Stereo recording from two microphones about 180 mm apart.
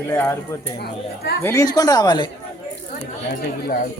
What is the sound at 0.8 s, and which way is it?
Speech, 65° left (ahead or behind).